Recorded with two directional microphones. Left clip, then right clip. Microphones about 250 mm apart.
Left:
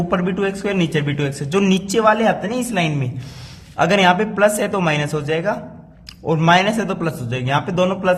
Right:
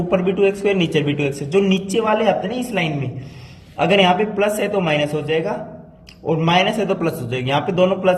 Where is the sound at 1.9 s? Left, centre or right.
Left.